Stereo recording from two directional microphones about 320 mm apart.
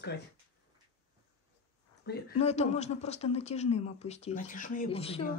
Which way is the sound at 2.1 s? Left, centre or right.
Left.